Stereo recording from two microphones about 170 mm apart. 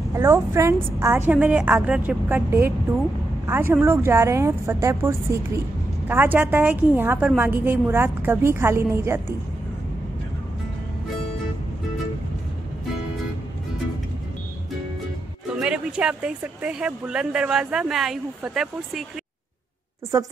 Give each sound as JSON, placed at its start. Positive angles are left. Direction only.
{"t": 0.1, "sound": "a woman's voice", "side_deg": -15}
{"t": 15.5, "sound": "speech", "side_deg": -5}
{"t": 20.1, "sound": "a woman's voice", "side_deg": -20}